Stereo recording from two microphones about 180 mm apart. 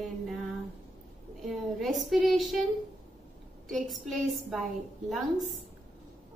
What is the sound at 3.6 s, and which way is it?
A woman's voice, centre (ahead or behind).